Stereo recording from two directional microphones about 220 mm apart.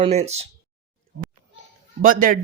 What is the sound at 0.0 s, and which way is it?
Speech, 30° right (ahead or behind).